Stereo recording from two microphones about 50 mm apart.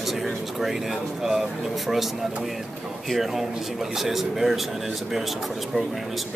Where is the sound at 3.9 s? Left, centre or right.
Centre.